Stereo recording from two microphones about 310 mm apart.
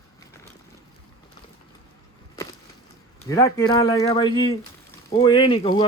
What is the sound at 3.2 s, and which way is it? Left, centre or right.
Speech, centre.